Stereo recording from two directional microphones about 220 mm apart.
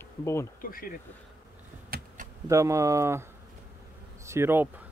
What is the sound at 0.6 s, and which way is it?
Speech, 40° left (ahead or behind).